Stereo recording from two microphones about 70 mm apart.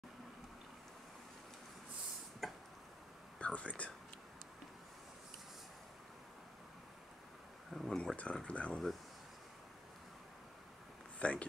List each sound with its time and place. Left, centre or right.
2.4 s tick-tock: centre
3.3 s speech: centre
7.7 s a sound: centre
8.2 s speech: centre
11.1 s speech: centre